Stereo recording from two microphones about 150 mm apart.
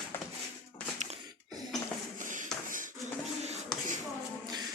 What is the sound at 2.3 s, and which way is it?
Shuffle, 65° right (ahead or behind).